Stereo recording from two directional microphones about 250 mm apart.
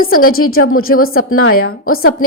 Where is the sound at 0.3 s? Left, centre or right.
Left.